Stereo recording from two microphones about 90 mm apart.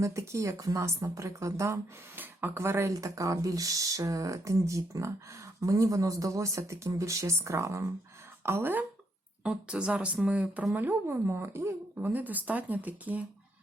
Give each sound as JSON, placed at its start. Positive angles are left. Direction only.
{"t": 0.0, "sound": "speech", "side_deg": -35}
{"t": 9.4, "sound": "a woman's voice", "side_deg": -10}
{"t": 11.9, "sound": "a woman's voice", "side_deg": -20}